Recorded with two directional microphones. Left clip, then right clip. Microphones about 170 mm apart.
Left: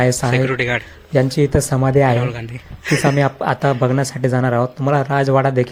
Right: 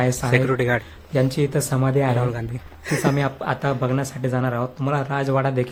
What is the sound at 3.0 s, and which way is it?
Speech, 30° left (ahead or behind).